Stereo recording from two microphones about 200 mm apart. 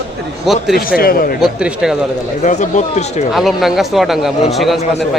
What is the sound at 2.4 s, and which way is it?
Speech, 35° left (ahead or behind).